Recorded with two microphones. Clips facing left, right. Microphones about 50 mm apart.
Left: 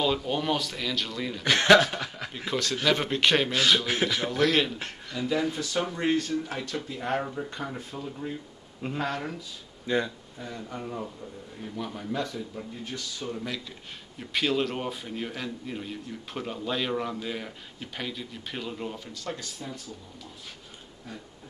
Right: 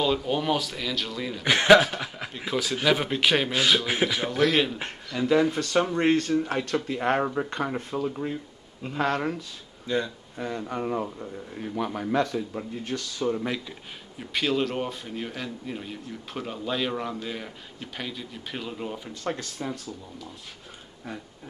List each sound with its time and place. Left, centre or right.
0.0 s a man's voice: centre
1.4 s a man's voice: centre
5.1 s speech: right
5.6 s speech: right
9.8 s speech: centre
10.3 s speech: right
13.2 s speech: right
14.3 s a man's voice: centre
19.2 s speech: right